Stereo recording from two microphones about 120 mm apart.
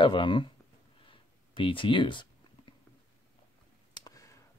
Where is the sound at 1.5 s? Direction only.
45° left (ahead or behind).